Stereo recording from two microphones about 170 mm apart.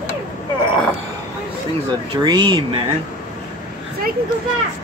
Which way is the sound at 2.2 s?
25° right (ahead or behind).